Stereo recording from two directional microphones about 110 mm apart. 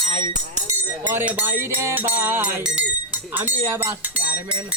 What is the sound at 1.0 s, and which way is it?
Speech, 15° right (ahead or behind).